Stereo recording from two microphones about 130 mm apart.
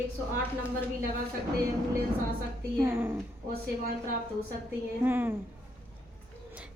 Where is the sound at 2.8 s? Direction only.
20° right (ahead or behind).